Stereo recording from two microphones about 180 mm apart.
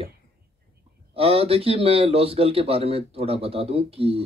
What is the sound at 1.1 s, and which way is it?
A man's voice, 35° right (ahead or behind).